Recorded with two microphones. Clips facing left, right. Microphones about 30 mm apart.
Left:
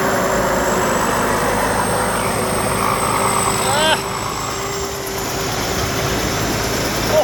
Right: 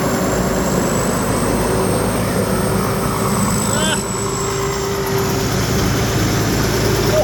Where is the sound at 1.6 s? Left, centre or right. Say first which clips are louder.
Even; left.